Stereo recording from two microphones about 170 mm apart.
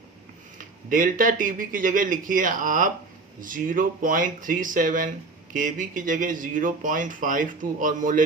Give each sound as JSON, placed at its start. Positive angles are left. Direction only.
{"t": 0.6, "sound": "speech", "side_deg": -50}